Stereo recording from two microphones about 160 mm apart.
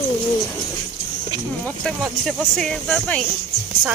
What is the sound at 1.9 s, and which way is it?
Speech, centre (ahead or behind).